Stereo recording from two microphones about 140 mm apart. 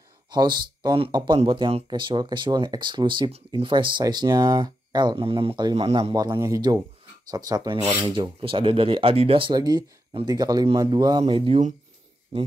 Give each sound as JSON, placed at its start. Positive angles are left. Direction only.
{"t": 0.3, "sound": "speech", "side_deg": -30}
{"t": 6.1, "sound": "speech", "side_deg": -25}